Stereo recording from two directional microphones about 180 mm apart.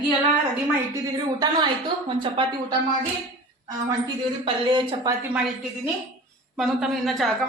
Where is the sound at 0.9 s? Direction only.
20° right (ahead or behind).